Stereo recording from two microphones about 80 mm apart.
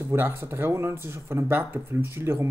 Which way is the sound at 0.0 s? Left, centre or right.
Right.